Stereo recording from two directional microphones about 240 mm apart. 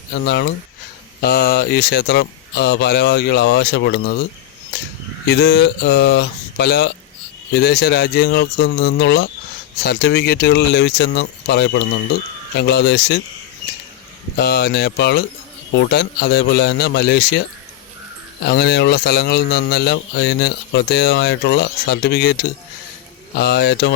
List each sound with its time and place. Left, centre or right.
0.3 s a man's voice: left
5.2 s a man's voice: left
14.3 s a man's voice: left
18.4 s a man's voice: left